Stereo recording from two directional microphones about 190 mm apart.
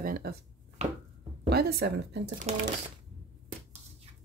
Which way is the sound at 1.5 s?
55° right (ahead or behind).